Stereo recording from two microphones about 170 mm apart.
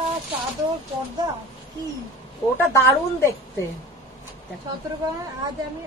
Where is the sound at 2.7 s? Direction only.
15° left (ahead or behind).